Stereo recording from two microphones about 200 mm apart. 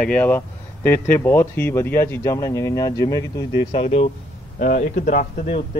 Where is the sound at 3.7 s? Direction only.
30° left (ahead or behind).